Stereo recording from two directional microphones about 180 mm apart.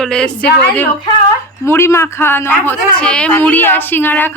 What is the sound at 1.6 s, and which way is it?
Speech, 15° left (ahead or behind).